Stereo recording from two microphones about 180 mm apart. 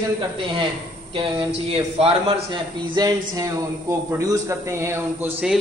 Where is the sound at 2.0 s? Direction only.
25° right (ahead or behind).